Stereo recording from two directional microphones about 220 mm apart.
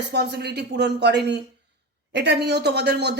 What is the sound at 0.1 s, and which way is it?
Speech, 50° right (ahead or behind).